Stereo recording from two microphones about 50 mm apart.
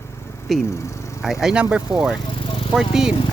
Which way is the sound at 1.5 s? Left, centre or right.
Right.